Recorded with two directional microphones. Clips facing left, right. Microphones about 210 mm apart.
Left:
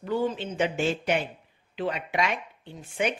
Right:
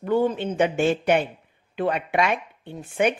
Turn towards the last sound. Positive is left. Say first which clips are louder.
# right 6 dB
turn(degrees=-55)  # may be behind; listen again after turning